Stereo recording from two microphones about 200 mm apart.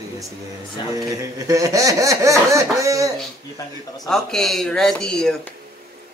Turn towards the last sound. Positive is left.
turn(degrees=5)  # may be behind; listen again after turning